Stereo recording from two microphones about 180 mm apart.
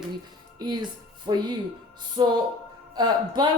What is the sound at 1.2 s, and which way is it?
Speech, 25° right (ahead or behind).